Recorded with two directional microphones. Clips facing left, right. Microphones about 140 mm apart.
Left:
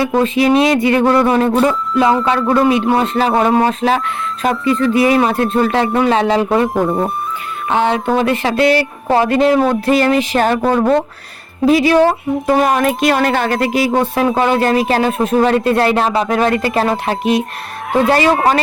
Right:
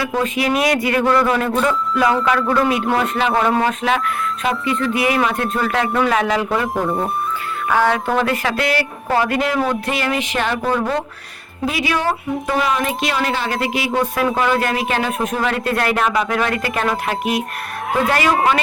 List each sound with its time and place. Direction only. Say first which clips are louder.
0.0 s speech: left 6 dB; 30° left (ahead or behind)